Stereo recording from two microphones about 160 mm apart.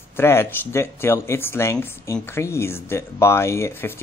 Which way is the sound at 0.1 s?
15° left (ahead or behind).